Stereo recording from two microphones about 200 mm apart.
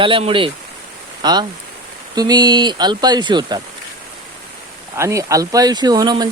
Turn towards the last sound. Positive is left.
turn(degrees=-20)  # may be behind; listen again after turning